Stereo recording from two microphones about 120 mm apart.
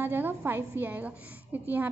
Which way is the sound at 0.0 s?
15° right (ahead or behind).